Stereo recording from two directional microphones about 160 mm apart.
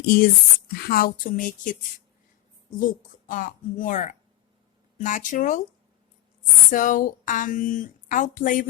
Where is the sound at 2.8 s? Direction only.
55° left (ahead or behind).